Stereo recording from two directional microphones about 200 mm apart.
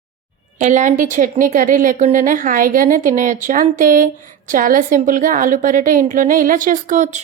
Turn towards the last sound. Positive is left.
turn(degrees=-40)  # may be behind; listen again after turning